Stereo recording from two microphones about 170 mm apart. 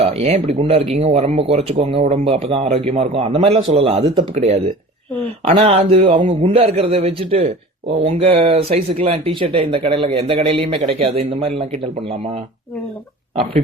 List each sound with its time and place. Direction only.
0.0 s speech: 40° right (ahead or behind)